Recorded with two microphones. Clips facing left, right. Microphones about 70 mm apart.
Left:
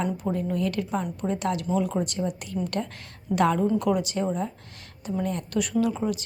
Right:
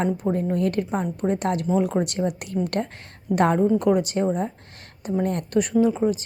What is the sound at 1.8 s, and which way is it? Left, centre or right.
Speech, right.